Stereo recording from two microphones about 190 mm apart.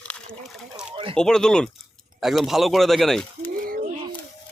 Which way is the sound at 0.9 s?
30° right (ahead or behind).